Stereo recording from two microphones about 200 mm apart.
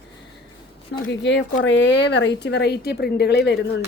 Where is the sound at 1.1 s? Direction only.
60° left (ahead or behind).